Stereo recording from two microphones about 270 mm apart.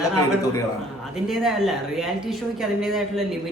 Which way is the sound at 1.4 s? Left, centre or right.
Centre.